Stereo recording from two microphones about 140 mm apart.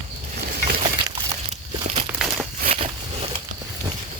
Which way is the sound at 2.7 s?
50° right (ahead or behind).